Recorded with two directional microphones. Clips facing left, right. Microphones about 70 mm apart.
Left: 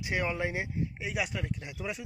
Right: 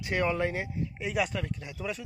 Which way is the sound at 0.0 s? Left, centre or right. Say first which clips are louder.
Right 3 dB; centre.